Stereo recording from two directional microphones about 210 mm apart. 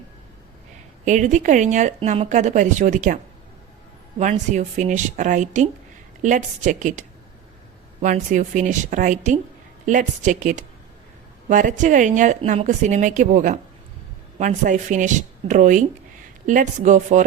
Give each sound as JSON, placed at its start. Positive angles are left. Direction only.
{"t": 1.0, "sound": "speech", "side_deg": -35}
{"t": 4.2, "sound": "speech", "side_deg": -35}
{"t": 8.0, "sound": "speech", "side_deg": -35}